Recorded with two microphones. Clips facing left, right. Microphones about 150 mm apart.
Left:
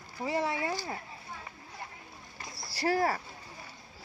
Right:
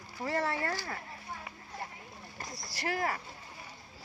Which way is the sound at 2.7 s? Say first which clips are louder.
Left 6 dB; 35° left (ahead or behind).